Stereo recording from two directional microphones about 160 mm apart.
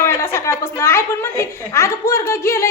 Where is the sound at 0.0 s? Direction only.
15° left (ahead or behind).